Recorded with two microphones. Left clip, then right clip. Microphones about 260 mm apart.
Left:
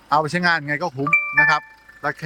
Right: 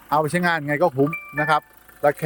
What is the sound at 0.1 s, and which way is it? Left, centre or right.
Speech, centre.